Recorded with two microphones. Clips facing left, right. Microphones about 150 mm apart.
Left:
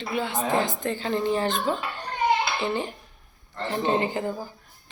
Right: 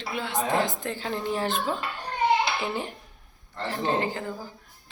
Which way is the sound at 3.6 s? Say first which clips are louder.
Left 2 dB; 20° left (ahead or behind).